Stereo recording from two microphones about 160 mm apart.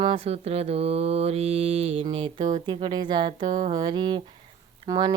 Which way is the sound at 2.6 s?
30° right (ahead or behind).